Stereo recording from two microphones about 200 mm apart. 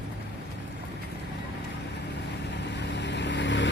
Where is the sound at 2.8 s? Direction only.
60° left (ahead or behind).